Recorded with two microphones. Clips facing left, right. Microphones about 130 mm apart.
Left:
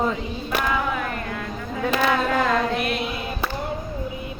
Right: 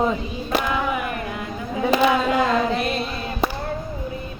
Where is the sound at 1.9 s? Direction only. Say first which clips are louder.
Right 3 dB; 15° right (ahead or behind).